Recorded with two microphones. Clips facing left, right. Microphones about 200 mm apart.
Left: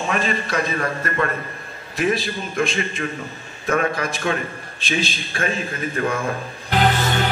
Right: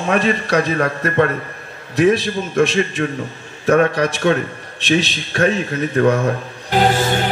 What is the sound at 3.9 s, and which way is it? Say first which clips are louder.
A man's voice: right 7 dB; 70° right (ahead or behind).